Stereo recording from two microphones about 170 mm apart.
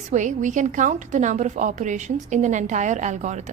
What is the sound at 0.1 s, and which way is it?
A woman's voice, 45° right (ahead or behind).